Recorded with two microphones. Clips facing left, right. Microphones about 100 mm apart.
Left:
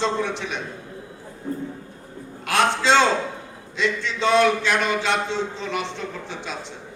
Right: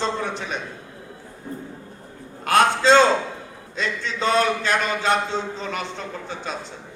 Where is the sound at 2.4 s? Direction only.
40° right (ahead or behind).